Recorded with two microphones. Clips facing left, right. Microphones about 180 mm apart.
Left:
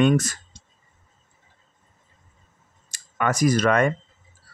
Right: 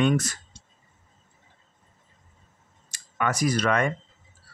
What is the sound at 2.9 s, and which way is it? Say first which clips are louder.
Speech: left 3 dB; 45° left (ahead or behind).